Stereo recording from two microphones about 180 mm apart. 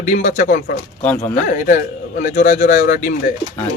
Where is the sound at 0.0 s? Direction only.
45° left (ahead or behind).